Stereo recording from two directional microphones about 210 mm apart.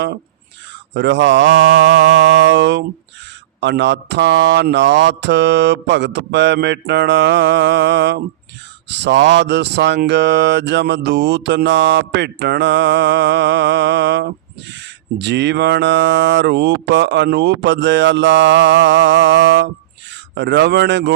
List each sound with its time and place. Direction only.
0.9 s speech: 55° right (ahead or behind)